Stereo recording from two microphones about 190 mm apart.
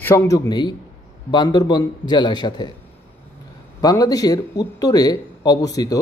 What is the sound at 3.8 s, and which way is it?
Speech, 20° left (ahead or behind).